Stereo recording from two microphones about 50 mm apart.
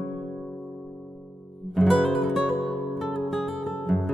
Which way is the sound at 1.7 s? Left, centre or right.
Centre.